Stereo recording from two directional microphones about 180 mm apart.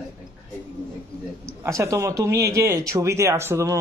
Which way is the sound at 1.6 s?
15° right (ahead or behind).